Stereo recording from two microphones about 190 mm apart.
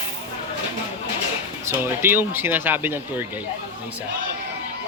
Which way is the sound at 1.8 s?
10° right (ahead or behind).